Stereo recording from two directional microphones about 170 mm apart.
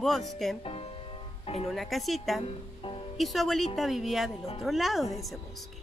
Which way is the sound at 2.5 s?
30° left (ahead or behind).